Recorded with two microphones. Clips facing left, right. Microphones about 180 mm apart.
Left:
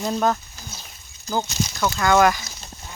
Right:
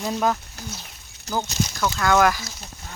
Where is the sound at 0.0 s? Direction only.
5° right (ahead or behind).